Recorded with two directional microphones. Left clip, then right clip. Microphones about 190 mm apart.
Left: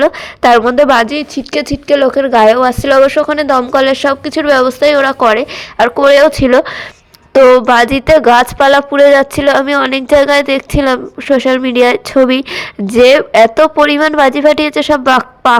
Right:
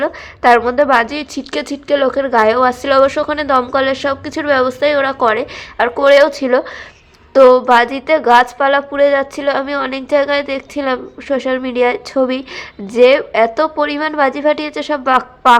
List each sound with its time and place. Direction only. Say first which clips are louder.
0.0 s speech: left 4 dB; 35° left (ahead or behind)